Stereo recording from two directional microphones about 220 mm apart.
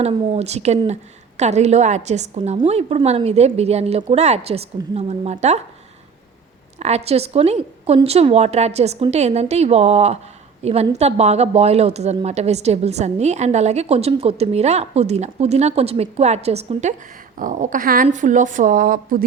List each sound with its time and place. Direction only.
0.0 s speech: 30° right (ahead or behind)
6.7 s speech: 30° right (ahead or behind)